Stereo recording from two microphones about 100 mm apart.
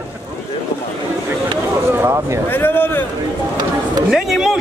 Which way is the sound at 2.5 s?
20° left (ahead or behind).